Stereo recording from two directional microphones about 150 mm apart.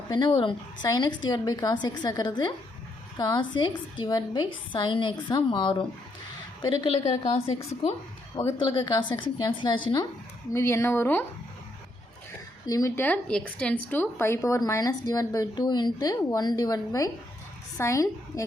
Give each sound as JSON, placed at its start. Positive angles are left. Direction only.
{"t": 0.1, "sound": "a woman's voice", "side_deg": 35}
{"t": 7.0, "sound": "a woman's voice", "side_deg": 45}
{"t": 8.4, "sound": "a woman's voice", "side_deg": 30}
{"t": 12.6, "sound": "a woman's voice", "side_deg": 20}